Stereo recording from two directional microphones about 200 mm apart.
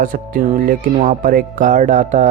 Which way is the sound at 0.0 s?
45° right (ahead or behind).